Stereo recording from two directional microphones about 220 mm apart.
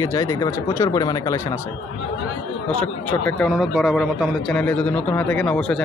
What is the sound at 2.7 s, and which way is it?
A man's voice, 5° left (ahead or behind).